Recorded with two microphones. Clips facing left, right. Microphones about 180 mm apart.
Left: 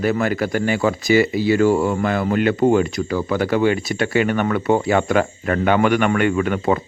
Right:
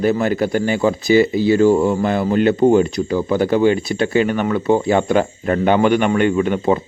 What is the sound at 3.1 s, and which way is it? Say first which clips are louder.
Speech: right 3 dB; 25° right (ahead or behind).